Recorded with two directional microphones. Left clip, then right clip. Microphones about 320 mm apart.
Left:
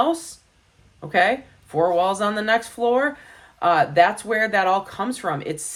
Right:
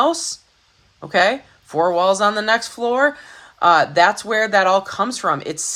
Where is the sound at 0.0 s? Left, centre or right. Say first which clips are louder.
Right 4 dB; centre.